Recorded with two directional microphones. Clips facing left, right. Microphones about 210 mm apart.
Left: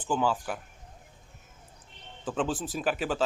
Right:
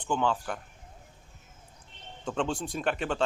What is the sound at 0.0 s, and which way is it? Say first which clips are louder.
Speech: left 1 dB; 5° left (ahead or behind).